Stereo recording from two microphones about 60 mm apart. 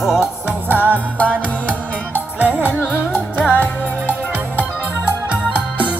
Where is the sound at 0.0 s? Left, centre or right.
Centre.